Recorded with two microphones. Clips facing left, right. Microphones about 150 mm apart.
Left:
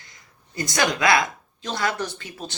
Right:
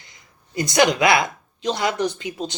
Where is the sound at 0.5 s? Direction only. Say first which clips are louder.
Right 6 dB; 20° right (ahead or behind).